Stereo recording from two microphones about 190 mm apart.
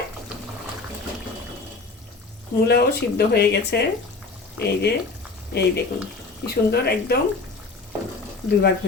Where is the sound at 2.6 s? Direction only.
60° left (ahead or behind).